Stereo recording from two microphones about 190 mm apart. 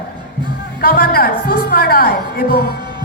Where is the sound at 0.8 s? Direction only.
50° left (ahead or behind).